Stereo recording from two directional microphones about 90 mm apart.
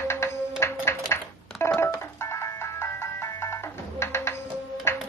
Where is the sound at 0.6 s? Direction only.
30° left (ahead or behind).